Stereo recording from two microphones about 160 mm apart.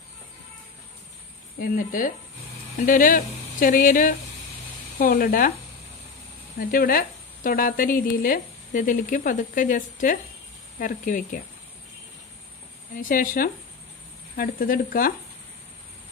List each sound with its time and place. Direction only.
1.6 s speech: 55° left (ahead or behind)
4.9 s speech: 75° left (ahead or behind)
6.6 s speech: 60° left (ahead or behind)
12.9 s speech: 60° left (ahead or behind)